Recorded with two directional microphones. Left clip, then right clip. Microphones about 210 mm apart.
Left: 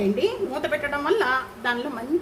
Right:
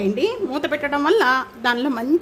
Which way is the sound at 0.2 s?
45° right (ahead or behind).